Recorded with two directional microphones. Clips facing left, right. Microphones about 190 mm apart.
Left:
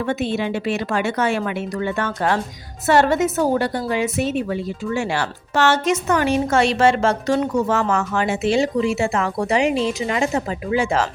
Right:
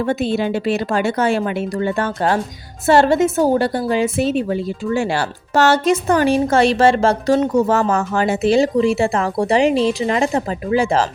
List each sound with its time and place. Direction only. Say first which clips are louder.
0.0 s a woman's voice: right 3 dB; 35° right (ahead or behind)